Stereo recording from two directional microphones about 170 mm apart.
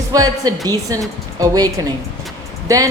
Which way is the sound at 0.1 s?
20° right (ahead or behind).